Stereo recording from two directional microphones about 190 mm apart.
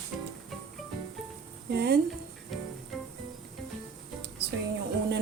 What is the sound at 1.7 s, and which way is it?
Speech, 60° right (ahead or behind).